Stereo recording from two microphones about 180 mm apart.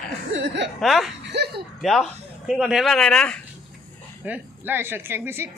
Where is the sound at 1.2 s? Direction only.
70° right (ahead or behind).